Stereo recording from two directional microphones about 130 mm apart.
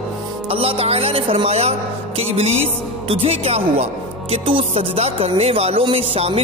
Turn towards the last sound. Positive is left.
turn(degrees=-50)  # may be behind; listen again after turning